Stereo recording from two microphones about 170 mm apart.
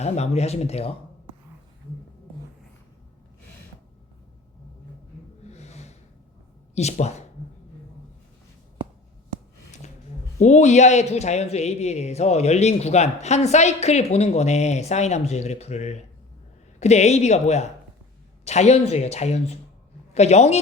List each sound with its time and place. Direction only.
0.0 s speech: 40° left (ahead or behind)
5.5 s gasp: 40° left (ahead or behind)
6.7 s speech: 40° left (ahead or behind)
10.4 s speech: 45° left (ahead or behind)